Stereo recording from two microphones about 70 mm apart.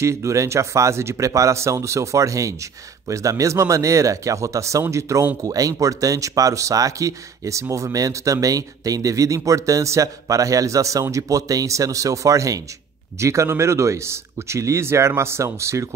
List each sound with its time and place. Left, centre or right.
0.0 s speech: right
5.4 s speech: right